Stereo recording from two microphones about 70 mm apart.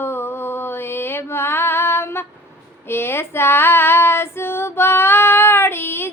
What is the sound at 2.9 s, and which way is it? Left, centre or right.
Female singing, left.